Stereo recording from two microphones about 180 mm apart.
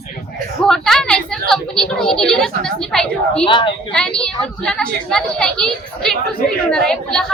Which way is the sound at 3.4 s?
25° left (ahead or behind).